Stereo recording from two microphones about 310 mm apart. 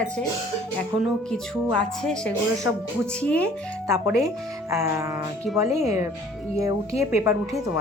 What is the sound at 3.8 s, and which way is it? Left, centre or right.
Speech, centre.